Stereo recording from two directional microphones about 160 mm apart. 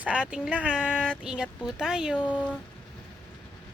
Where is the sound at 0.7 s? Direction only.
5° right (ahead or behind).